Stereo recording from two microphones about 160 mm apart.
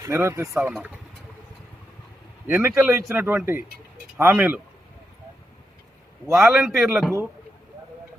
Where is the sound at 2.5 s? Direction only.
15° right (ahead or behind).